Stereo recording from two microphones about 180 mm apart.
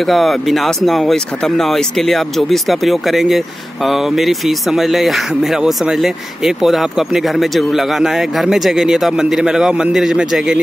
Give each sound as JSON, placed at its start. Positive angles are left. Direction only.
{"t": 0.0, "sound": "speech", "side_deg": 0}